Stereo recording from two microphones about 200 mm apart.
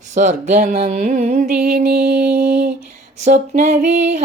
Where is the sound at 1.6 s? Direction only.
50° right (ahead or behind).